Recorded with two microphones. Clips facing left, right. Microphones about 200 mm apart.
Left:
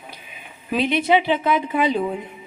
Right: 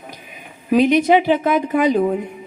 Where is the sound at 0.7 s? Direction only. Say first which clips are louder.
Right 6 dB; 45° right (ahead or behind).